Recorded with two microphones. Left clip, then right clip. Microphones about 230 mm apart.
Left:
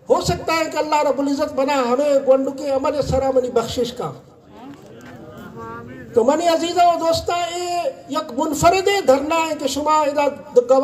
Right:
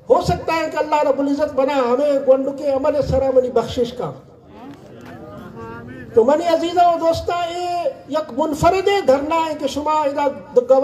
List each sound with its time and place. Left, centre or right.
0.1 s a man's voice: left
6.1 s a man's voice: left